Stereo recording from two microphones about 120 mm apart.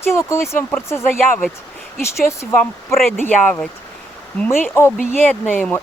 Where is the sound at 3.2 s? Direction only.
10° left (ahead or behind).